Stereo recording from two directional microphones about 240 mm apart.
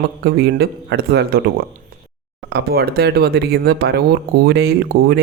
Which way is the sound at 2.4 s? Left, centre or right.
Right.